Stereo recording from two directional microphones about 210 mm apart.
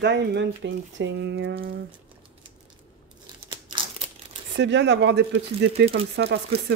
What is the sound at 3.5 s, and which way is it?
Crumpling, 20° right (ahead or behind).